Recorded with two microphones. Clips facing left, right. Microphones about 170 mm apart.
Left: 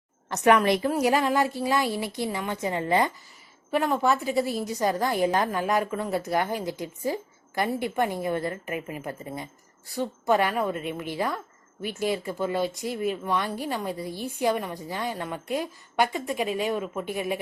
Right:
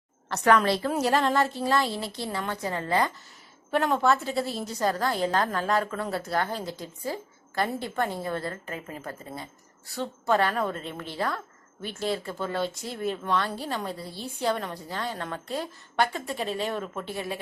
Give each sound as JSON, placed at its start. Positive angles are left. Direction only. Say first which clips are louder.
{"t": 0.3, "sound": "a woman's voice", "louder": "left 2 dB", "side_deg": 20}
{"t": 3.7, "sound": "a woman's voice", "louder": "even", "side_deg": 5}